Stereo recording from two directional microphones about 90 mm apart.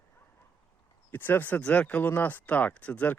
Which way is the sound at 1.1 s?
20° left (ahead or behind).